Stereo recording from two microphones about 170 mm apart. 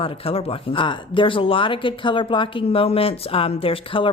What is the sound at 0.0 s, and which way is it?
Speech, 35° left (ahead or behind).